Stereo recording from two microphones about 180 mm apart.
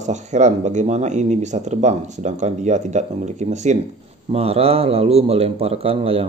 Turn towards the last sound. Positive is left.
turn(degrees=-30)  # may be behind; listen again after turning